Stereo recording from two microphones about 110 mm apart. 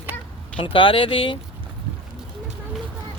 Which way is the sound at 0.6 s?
55° left (ahead or behind).